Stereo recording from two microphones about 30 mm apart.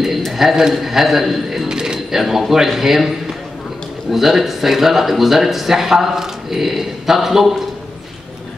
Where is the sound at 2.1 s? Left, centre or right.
Centre.